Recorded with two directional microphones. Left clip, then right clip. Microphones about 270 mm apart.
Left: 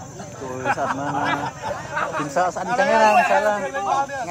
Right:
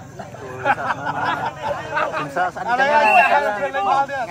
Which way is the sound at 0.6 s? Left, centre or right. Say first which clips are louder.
Right 3 dB; right.